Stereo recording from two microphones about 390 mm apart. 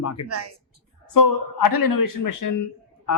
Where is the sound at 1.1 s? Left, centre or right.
Left.